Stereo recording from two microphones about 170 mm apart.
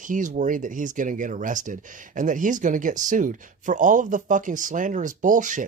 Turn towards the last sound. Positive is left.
turn(degrees=-50)  # may be behind; listen again after turning